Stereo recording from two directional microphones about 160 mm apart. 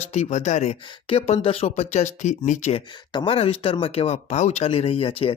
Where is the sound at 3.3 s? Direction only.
40° left (ahead or behind).